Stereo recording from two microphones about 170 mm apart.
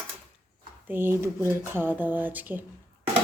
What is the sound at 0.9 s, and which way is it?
A woman's voice, 15° right (ahead or behind).